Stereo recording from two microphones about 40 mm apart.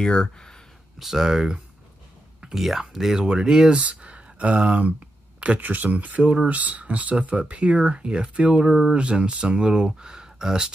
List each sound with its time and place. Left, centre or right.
0.0 s speech: centre
0.9 s speech: centre
3.2 s speech: centre
3.7 s speech: right
5.6 s speech: right
8.6 s speech: centre
8.9 s speech: right